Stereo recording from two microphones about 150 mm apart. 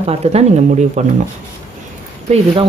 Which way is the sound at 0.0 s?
45° right (ahead or behind).